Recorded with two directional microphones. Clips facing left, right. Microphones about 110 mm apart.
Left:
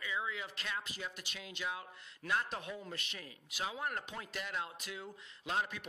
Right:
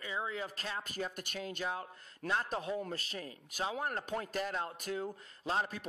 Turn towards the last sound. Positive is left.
turn(degrees=-35)  # may be behind; listen again after turning